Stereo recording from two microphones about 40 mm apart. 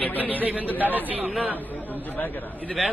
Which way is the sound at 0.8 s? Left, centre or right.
Right.